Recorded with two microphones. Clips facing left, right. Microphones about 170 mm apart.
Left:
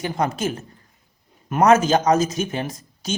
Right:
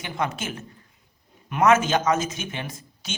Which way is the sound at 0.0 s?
40° left (ahead or behind).